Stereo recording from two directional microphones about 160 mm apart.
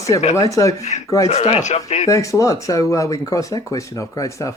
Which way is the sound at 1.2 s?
40° left (ahead or behind).